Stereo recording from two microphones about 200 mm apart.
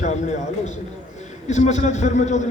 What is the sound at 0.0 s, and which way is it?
A man's voice, 35° left (ahead or behind).